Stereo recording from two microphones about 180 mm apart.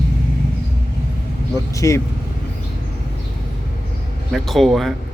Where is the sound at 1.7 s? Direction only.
15° left (ahead or behind).